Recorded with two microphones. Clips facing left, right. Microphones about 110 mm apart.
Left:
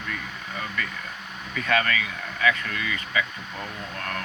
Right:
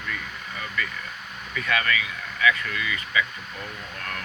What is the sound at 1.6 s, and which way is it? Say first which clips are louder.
Speech: left 2 dB; 35° left (ahead or behind).